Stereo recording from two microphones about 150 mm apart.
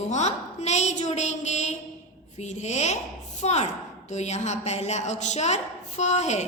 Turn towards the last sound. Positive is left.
turn(degrees=50)  # may be behind; listen again after turning